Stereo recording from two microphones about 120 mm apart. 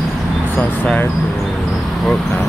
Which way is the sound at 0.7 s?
15° left (ahead or behind).